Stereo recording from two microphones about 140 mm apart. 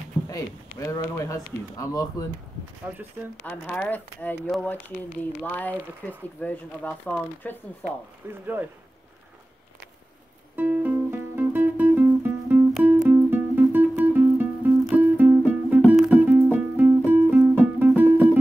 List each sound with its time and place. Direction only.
0.3 s speech: 25° left (ahead or behind)
2.8 s speech: 15° right (ahead or behind)
3.4 s speech: 10° left (ahead or behind)
8.3 s speech: 15° right (ahead or behind)
10.5 s music: 10° right (ahead or behind)